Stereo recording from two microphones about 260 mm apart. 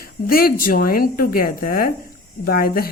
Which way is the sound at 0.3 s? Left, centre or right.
Left.